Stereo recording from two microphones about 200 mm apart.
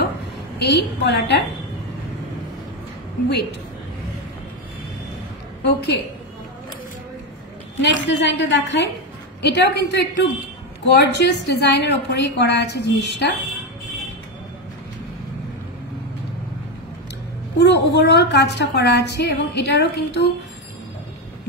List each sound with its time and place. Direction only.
0.6 s a woman's voice: 60° left (ahead or behind)
5.6 s a woman's voice: 55° left (ahead or behind)
7.8 s a woman's voice: 60° left (ahead or behind)
17.6 s a woman's voice: 60° left (ahead or behind)